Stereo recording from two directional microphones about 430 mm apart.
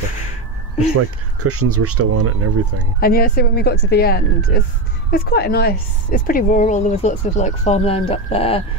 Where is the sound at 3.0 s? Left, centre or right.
Left.